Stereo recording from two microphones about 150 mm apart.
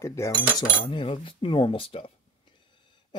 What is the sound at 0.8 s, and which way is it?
Speech, 35° left (ahead or behind).